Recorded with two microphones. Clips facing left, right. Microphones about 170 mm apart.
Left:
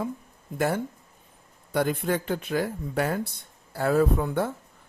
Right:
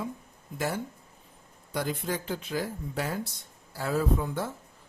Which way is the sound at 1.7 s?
60° left (ahead or behind).